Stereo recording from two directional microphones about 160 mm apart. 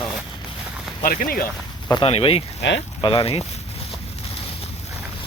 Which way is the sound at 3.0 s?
35° left (ahead or behind).